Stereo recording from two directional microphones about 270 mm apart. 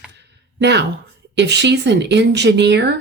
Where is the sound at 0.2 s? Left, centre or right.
Right.